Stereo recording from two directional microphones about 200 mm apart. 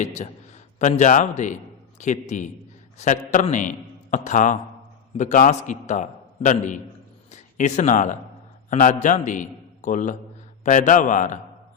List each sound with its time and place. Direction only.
0.0 s a man's voice: 35° left (ahead or behind)